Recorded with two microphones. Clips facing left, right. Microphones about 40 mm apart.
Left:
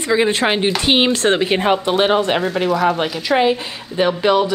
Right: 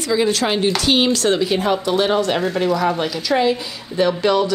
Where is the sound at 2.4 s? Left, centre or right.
Centre.